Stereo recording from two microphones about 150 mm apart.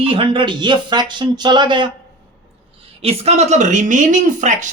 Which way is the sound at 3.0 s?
45° right (ahead or behind).